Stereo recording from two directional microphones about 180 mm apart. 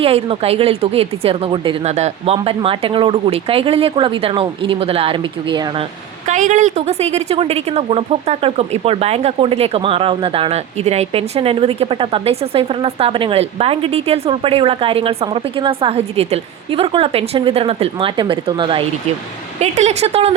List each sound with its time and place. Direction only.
0.0 s a woman's voice: 30° right (ahead or behind)
6.2 s a woman's voice: 45° right (ahead or behind); by 18.9 s 25° right (ahead or behind)
19.5 s a woman's voice: 40° right (ahead or behind)